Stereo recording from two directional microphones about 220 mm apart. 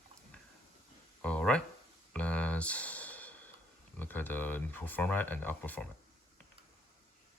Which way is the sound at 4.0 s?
10° left (ahead or behind).